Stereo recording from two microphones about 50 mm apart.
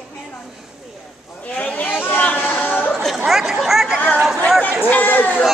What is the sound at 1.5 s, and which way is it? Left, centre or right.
Chatter, left.